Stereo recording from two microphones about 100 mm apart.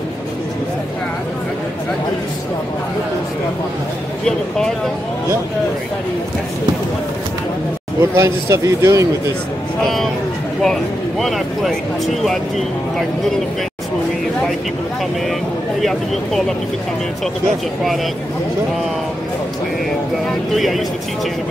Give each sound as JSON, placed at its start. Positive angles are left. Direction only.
{"t": 8.0, "sound": "a man's voice", "side_deg": -30}
{"t": 10.6, "sound": "speech", "side_deg": 0}
{"t": 15.8, "sound": "speech", "side_deg": 5}
{"t": 20.2, "sound": "speech", "side_deg": 0}